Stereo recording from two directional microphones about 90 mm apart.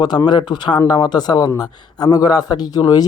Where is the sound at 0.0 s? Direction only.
55° left (ahead or behind).